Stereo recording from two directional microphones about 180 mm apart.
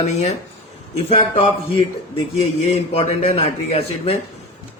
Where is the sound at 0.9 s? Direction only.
30° left (ahead or behind).